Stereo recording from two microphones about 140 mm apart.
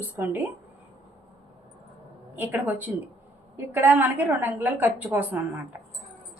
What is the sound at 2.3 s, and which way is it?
Speech, 15° right (ahead or behind).